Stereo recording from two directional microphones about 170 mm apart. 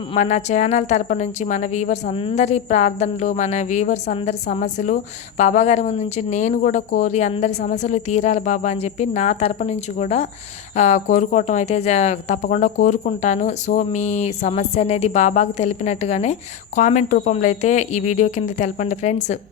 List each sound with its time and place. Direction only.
0.1 s speech: 45° left (ahead or behind)